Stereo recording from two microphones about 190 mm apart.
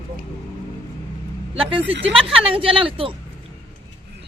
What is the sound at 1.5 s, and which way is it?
Speech, 30° right (ahead or behind).